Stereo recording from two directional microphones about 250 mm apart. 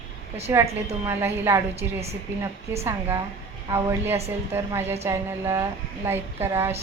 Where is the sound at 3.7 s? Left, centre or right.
Centre.